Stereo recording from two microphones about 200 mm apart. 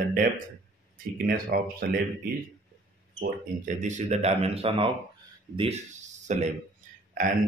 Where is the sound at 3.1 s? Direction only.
40° right (ahead or behind).